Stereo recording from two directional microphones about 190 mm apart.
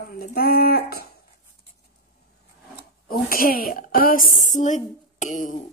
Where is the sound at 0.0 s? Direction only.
50° left (ahead or behind).